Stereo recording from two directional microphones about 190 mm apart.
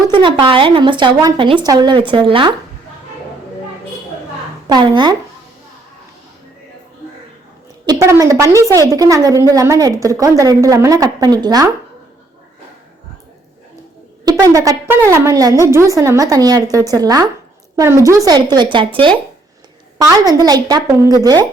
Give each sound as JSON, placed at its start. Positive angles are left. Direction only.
{"t": 0.1, "sound": "speech", "side_deg": -25}
{"t": 4.7, "sound": "speech", "side_deg": -25}
{"t": 7.9, "sound": "speech", "side_deg": -15}
{"t": 14.3, "sound": "speech", "side_deg": -20}